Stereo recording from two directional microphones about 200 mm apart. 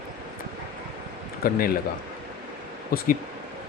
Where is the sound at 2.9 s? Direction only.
50° left (ahead or behind).